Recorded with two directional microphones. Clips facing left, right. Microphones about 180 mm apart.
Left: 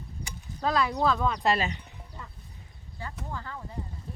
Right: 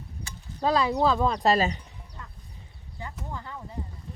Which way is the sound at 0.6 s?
30° right (ahead or behind).